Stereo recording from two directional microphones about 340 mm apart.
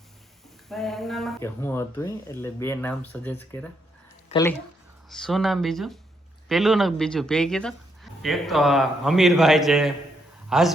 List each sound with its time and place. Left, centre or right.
0.7 s a woman's voice: centre